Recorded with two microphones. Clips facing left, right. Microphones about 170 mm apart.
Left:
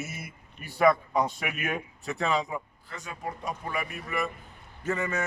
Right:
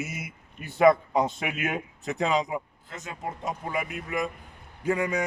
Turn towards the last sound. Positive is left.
turn(degrees=-10)  # may be behind; listen again after turning